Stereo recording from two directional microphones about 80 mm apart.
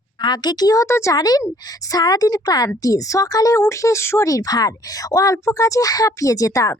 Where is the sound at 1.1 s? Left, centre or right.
Left.